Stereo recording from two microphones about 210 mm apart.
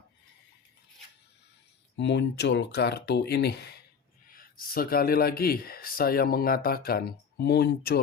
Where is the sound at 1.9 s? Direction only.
55° left (ahead or behind).